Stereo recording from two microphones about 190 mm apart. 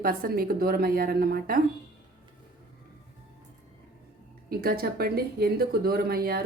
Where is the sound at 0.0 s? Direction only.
50° right (ahead or behind).